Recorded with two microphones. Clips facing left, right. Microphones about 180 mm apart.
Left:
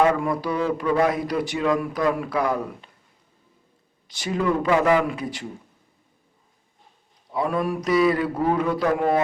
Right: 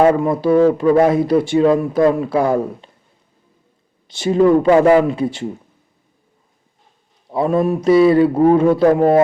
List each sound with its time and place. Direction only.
0.0 s speech: 25° right (ahead or behind)
4.1 s speech: 30° right (ahead or behind)
7.3 s speech: 25° right (ahead or behind)
9.0 s speech: 40° right (ahead or behind)